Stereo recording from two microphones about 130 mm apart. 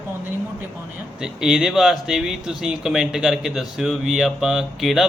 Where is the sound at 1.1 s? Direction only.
5° right (ahead or behind).